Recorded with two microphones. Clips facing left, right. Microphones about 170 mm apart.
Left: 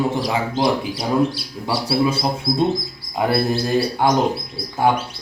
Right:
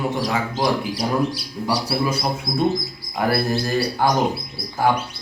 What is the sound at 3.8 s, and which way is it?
Speech, 20° left (ahead or behind).